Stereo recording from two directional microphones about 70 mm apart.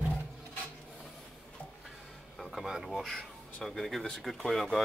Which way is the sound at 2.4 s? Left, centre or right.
Centre.